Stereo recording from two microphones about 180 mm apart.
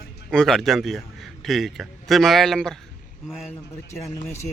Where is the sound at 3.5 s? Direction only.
15° left (ahead or behind).